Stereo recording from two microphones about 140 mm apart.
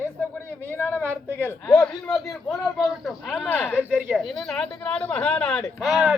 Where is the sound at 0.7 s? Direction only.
10° left (ahead or behind).